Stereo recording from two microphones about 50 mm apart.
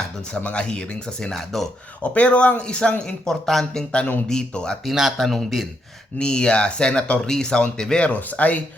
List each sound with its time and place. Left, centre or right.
0.3 s speech: left
1.5 s speech: centre
2.0 s speech: left
4.9 s a man's voice: centre
6.1 s speech: centre
8.0 s speech: left